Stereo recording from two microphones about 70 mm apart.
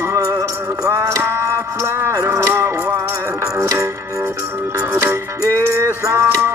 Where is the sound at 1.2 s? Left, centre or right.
Right.